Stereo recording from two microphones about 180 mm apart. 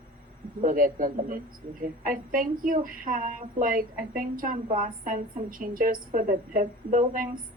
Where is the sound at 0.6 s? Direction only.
50° right (ahead or behind).